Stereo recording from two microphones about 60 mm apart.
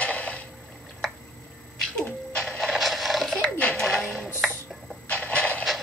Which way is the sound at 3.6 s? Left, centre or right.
Left.